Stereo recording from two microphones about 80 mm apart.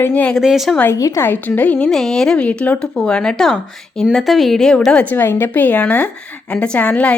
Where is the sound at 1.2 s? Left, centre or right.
Left.